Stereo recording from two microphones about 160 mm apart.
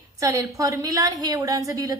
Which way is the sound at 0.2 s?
20° right (ahead or behind).